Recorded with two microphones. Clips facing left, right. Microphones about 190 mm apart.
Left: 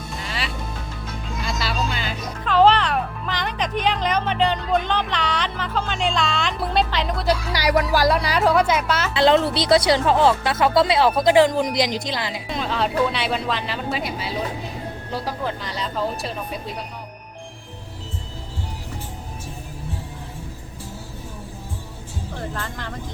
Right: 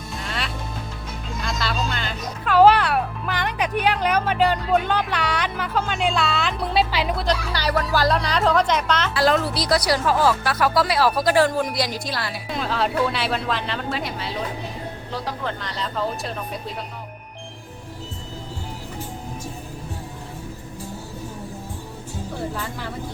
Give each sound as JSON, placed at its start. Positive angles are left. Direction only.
{"t": 0.3, "sound": "music", "side_deg": 0}
{"t": 1.5, "sound": "speech", "side_deg": 5}
{"t": 2.4, "sound": "speech", "side_deg": -10}
{"t": 7.3, "sound": "speech", "side_deg": 10}
{"t": 9.1, "sound": "speech", "side_deg": 25}
{"t": 12.5, "sound": "speech", "side_deg": 0}
{"t": 22.4, "sound": "speech", "side_deg": -10}